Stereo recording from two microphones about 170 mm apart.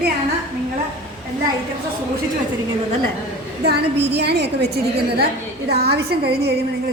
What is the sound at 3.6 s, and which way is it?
A woman's voice, 70° right (ahead or behind).